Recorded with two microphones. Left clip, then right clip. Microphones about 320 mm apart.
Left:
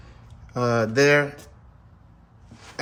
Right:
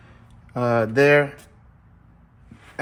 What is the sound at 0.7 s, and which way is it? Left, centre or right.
Speech, centre.